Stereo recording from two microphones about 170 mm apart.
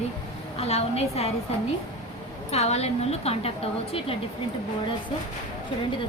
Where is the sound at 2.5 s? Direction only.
40° left (ahead or behind).